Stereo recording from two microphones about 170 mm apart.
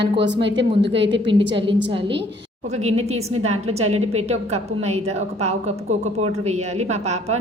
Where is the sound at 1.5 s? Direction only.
30° right (ahead or behind).